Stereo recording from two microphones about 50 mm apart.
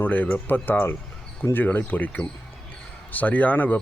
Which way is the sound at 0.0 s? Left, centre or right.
Left.